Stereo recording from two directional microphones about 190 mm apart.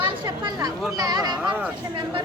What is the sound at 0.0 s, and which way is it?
Chatter, 20° right (ahead or behind).